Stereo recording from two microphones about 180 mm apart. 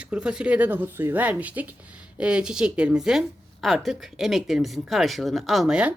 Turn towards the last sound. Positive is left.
turn(degrees=-5)  # may be behind; listen again after turning